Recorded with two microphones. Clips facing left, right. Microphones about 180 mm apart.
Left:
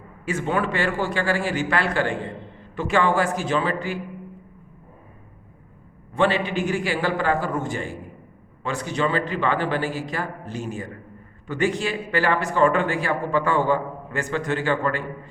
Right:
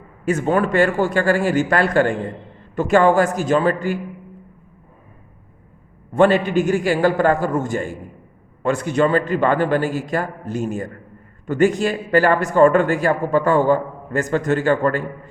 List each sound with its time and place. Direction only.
0.3 s speech: 45° right (ahead or behind)
6.1 s speech: 45° right (ahead or behind)